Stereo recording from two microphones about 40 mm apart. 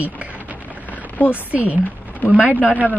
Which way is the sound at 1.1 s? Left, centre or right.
Left.